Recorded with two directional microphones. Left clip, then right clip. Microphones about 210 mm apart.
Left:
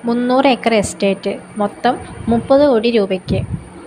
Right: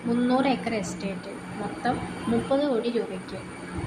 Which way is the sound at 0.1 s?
40° left (ahead or behind).